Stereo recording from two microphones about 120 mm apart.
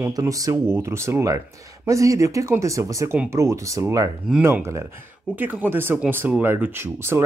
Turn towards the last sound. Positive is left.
turn(degrees=-20)  # may be behind; listen again after turning